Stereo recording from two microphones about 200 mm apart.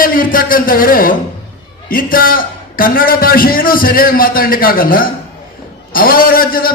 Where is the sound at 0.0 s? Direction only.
45° left (ahead or behind).